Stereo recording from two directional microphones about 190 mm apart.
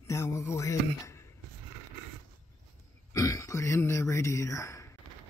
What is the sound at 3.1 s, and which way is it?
Speech, 15° left (ahead or behind).